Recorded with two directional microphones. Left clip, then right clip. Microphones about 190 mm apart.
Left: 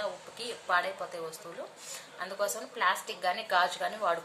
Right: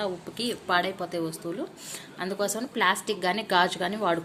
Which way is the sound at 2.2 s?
45° right (ahead or behind).